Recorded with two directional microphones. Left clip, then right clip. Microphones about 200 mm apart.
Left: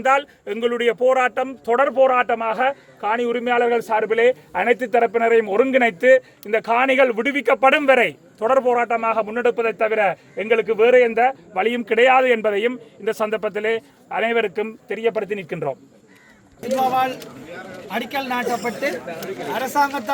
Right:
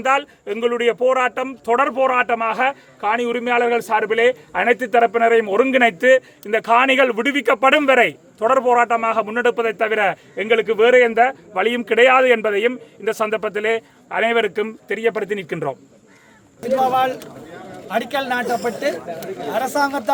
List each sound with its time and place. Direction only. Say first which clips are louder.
0.0 s speech: even; centre (ahead or behind)
16.9 s speech: right 2 dB; 40° right (ahead or behind)